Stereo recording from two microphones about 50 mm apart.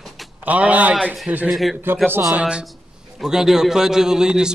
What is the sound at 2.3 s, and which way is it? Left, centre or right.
Speech, right.